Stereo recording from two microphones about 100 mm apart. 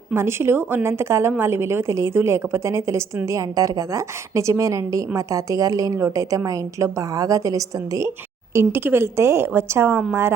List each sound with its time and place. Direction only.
0.1 s a woman's voice: 25° right (ahead or behind)